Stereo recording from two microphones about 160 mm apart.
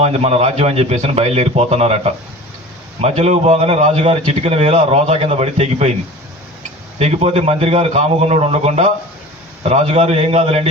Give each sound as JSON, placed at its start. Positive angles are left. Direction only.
{"t": 0.0, "sound": "a man's voice", "side_deg": -40}
{"t": 7.0, "sound": "a man's voice", "side_deg": -40}